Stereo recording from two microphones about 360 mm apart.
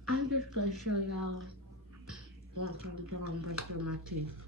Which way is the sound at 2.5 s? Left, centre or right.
Right.